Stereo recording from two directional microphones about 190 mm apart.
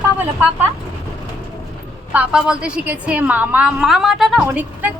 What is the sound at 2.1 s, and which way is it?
A woman's voice, 5° right (ahead or behind).